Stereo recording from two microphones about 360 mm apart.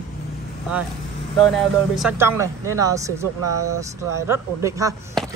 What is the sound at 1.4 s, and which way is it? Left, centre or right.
Speech, centre.